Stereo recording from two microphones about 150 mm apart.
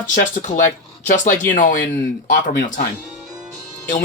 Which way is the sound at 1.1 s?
60° left (ahead or behind).